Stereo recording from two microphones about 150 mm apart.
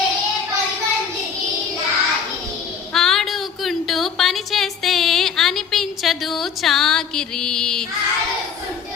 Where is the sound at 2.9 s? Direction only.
Centre (ahead or behind).